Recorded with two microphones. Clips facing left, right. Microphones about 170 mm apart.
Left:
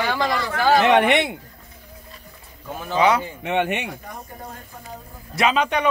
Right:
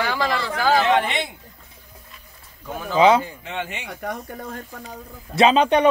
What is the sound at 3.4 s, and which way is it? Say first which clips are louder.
Speech: left 8 dB; 65° left (ahead or behind).